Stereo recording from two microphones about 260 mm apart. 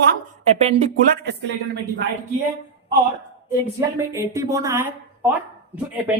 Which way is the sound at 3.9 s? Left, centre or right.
Centre.